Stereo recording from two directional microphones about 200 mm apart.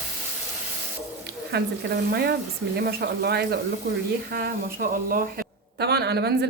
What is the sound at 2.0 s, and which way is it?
Speech, 50° right (ahead or behind).